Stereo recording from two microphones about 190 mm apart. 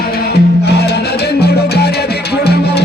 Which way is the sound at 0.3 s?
60° left (ahead or behind).